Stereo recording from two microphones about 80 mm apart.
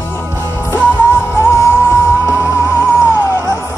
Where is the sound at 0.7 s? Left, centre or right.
Left.